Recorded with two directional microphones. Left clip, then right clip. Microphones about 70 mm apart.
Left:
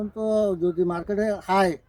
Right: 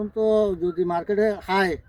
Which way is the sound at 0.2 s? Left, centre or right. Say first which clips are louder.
Right 2 dB; left.